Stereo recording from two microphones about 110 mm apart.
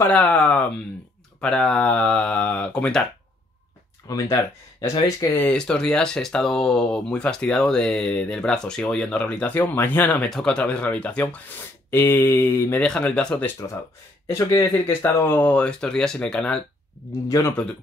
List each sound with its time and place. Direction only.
0.0 s speech: 10° left (ahead or behind)
4.1 s speech: 30° left (ahead or behind)
5.5 s speech: 5° left (ahead or behind)
11.9 s speech: 20° left (ahead or behind)
12.8 s speech: 10° left (ahead or behind)
14.2 s speech: 30° left (ahead or behind); by 16.6 s 10° left (ahead or behind)